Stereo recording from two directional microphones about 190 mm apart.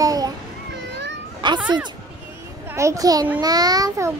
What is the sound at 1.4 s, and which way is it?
Speech, 25° right (ahead or behind).